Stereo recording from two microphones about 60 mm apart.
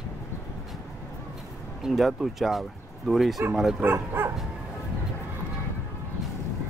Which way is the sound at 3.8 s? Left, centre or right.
Right.